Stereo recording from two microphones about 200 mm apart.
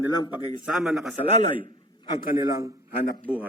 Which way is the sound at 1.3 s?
35° right (ahead or behind).